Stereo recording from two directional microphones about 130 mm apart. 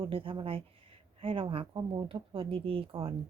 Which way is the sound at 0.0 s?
45° right (ahead or behind).